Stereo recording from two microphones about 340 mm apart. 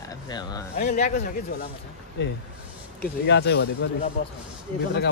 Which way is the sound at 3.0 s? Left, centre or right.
Left.